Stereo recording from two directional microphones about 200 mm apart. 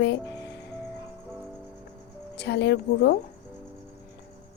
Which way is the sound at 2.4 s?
55° left (ahead or behind).